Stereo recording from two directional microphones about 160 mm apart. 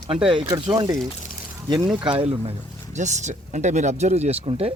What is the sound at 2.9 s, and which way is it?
Speech, 45° right (ahead or behind).